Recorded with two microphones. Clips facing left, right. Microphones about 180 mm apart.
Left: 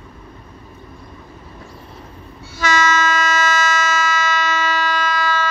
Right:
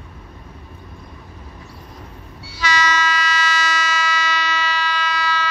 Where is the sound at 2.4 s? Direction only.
50° left (ahead or behind).